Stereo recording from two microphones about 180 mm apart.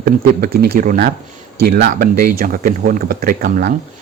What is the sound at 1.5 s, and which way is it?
Speech, 60° right (ahead or behind).